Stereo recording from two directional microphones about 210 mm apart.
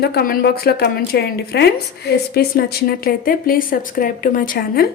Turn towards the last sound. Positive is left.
turn(degrees=45)  # may be behind; listen again after turning